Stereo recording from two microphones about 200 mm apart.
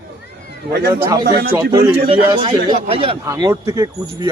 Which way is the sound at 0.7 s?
55° right (ahead or behind).